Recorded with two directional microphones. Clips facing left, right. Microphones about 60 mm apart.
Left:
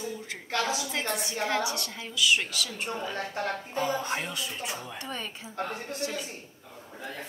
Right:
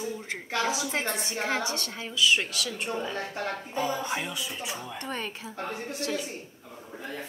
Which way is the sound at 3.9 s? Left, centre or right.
Centre.